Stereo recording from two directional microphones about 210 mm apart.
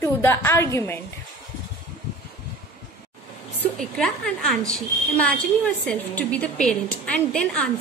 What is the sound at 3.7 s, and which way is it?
A woman's voice, 5° left (ahead or behind).